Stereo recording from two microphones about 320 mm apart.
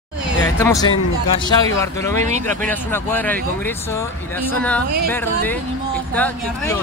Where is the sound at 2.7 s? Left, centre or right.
Centre.